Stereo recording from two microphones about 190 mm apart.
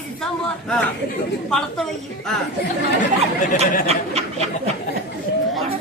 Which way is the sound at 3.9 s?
35° right (ahead or behind).